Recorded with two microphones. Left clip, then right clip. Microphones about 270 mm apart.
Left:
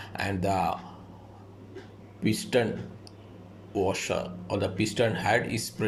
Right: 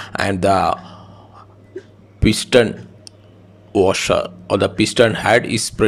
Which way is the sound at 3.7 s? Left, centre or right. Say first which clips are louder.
Right 13 dB; right.